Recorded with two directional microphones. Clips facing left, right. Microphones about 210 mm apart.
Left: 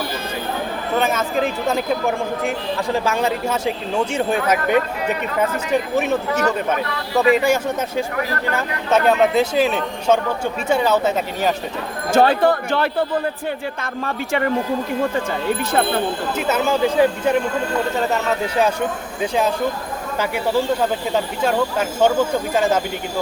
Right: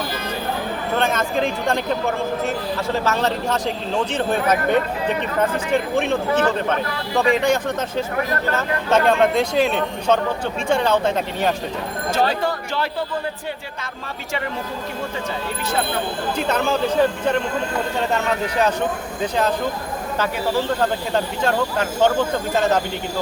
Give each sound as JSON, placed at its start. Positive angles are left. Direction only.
{"t": 0.9, "sound": "speech", "side_deg": 5}
{"t": 3.0, "sound": "speech", "side_deg": 10}
{"t": 7.3, "sound": "speech", "side_deg": 5}
{"t": 12.1, "sound": "speech", "side_deg": 50}
{"t": 16.4, "sound": "speech", "side_deg": 5}
{"t": 19.2, "sound": "speech", "side_deg": 10}
{"t": 21.1, "sound": "speech", "side_deg": 10}